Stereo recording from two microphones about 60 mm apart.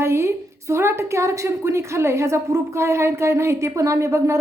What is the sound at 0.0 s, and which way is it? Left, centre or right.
A woman's voice, right.